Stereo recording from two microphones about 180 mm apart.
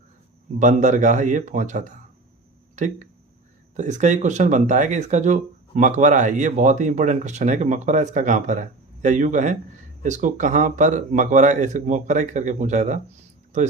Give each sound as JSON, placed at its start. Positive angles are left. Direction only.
{"t": 0.6, "sound": "speech", "side_deg": -45}